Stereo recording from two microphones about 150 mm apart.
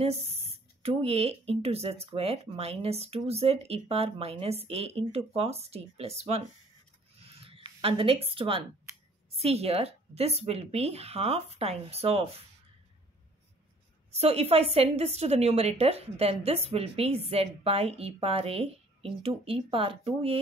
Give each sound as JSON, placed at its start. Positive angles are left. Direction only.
{"t": 0.0, "sound": "speech", "side_deg": -45}
{"t": 7.2, "sound": "a sound", "side_deg": -40}
{"t": 9.3, "sound": "speech", "side_deg": -40}
{"t": 14.1, "sound": "a woman's voice", "side_deg": -45}